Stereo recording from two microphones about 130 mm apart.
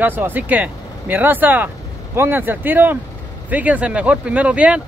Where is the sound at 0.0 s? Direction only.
15° right (ahead or behind).